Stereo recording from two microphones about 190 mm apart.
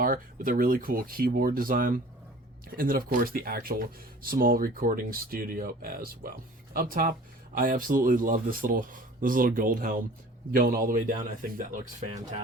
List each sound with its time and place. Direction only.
0.0 s speech: 50° right (ahead or behind)